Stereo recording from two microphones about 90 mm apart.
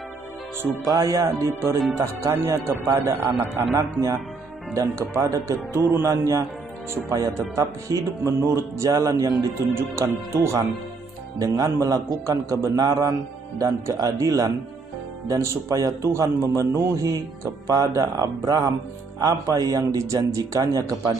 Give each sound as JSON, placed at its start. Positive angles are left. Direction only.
{"t": 0.8, "sound": "music", "side_deg": -40}
{"t": 2.3, "sound": "a man's voice", "side_deg": -30}
{"t": 3.5, "sound": "music", "side_deg": -35}
{"t": 9.6, "sound": "a man's voice", "side_deg": -30}
{"t": 11.3, "sound": "music", "side_deg": -40}
{"t": 15.4, "sound": "music", "side_deg": -30}